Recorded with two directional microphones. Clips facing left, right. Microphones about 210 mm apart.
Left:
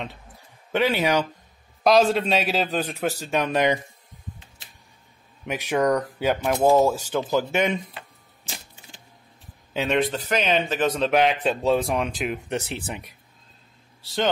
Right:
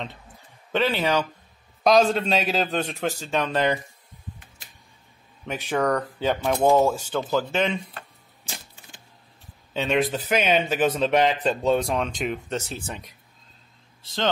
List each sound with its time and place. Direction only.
0.7 s speech: 15° left (ahead or behind)
1.8 s speech: centre (ahead or behind)
5.4 s speech: 10° left (ahead or behind)
9.8 s speech: centre (ahead or behind)
12.4 s speech: 15° left (ahead or behind)